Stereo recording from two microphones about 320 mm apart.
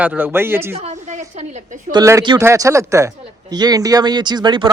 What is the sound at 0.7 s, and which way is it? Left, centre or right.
A woman's voice, centre.